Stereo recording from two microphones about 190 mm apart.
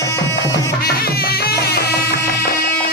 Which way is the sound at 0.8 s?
55° left (ahead or behind).